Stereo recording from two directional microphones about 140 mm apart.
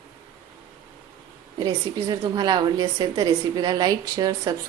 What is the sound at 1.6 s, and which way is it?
A woman's voice, 30° right (ahead or behind).